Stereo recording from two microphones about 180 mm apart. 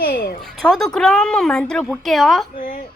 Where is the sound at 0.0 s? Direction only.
55° left (ahead or behind).